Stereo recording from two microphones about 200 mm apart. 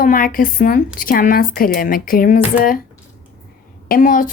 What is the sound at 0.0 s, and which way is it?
Speech, 45° left (ahead or behind).